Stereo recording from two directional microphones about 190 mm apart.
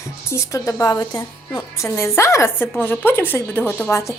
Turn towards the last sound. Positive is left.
turn(degrees=15)  # may be behind; listen again after turning